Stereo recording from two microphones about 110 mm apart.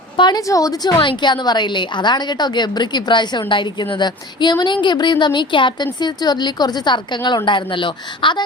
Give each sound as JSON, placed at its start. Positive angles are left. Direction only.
{"t": 0.2, "sound": "a woman's voice", "side_deg": 40}
{"t": 0.4, "sound": "a woman's voice", "side_deg": 30}